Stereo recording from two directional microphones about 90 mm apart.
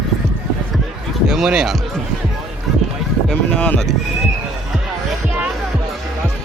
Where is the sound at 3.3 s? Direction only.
15° left (ahead or behind).